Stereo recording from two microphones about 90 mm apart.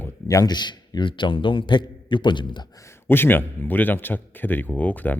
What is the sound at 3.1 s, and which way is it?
A man's voice, 25° left (ahead or behind).